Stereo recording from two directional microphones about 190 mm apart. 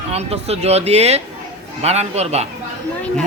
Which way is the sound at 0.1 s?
35° right (ahead or behind).